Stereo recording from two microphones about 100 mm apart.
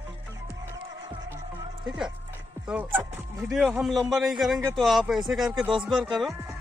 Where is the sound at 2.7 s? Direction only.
15° right (ahead or behind).